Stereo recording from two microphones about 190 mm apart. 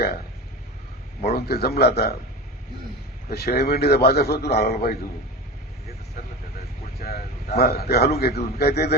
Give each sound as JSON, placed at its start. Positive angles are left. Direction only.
{"t": 1.2, "sound": "a man's voice", "side_deg": 55}
{"t": 3.2, "sound": "a man's voice", "side_deg": 55}
{"t": 7.0, "sound": "a man's voice", "side_deg": 55}